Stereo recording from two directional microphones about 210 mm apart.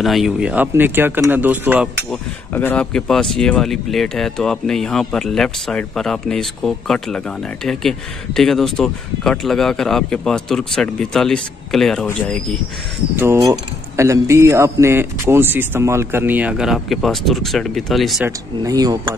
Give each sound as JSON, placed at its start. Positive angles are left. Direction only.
{"t": 0.0, "sound": "speech", "side_deg": 0}
{"t": 2.0, "sound": "speech", "side_deg": 10}
{"t": 13.1, "sound": "speech", "side_deg": -10}
{"t": 18.6, "sound": "speech", "side_deg": -15}